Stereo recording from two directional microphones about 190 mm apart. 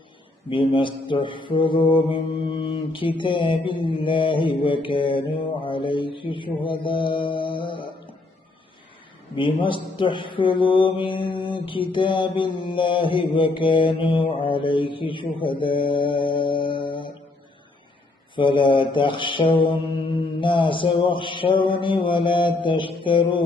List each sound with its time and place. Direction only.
0.5 s mantra: 25° left (ahead or behind)
9.3 s mantra: 25° left (ahead or behind)
18.3 s mantra: 25° left (ahead or behind)